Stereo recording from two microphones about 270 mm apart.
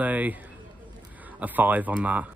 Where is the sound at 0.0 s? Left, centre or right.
Centre.